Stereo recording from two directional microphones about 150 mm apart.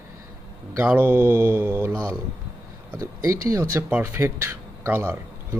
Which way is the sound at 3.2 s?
20° right (ahead or behind).